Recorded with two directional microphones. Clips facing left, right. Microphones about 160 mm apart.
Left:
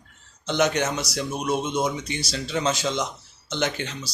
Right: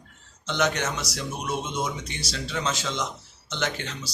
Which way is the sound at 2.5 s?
15° left (ahead or behind).